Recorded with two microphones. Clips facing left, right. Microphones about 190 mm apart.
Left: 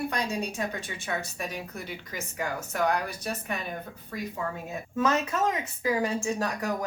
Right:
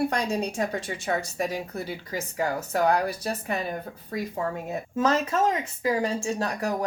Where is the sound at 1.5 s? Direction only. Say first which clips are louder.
Right 5 dB; 30° right (ahead or behind).